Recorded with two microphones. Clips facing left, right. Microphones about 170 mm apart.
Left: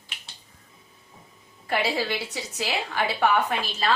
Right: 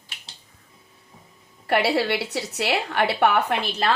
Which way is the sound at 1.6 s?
65° right (ahead or behind).